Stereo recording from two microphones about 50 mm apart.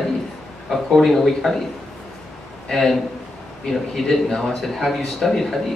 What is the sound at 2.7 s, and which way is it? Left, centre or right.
A man's voice, centre.